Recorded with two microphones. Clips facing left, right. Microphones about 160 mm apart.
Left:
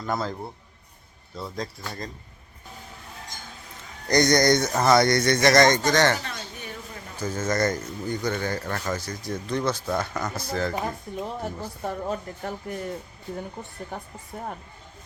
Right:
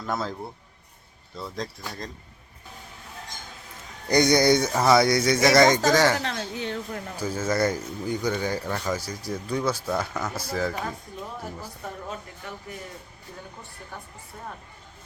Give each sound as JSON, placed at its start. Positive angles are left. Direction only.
{"t": 0.0, "sound": "speech", "side_deg": 0}
{"t": 1.4, "sound": "speech", "side_deg": 0}
{"t": 4.1, "sound": "speech", "side_deg": -10}
{"t": 6.1, "sound": "a sound", "side_deg": -80}
{"t": 7.2, "sound": "speech", "side_deg": -10}
{"t": 11.4, "sound": "speech", "side_deg": 30}